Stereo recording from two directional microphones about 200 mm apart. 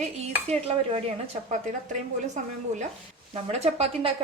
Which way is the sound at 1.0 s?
30° right (ahead or behind).